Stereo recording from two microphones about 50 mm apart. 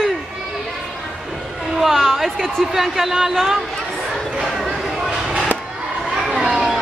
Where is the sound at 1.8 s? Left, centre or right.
Centre.